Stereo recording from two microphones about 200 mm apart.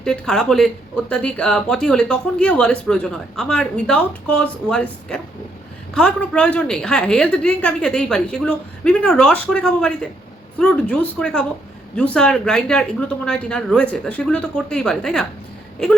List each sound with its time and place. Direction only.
0.0 s speech: 5° left (ahead or behind)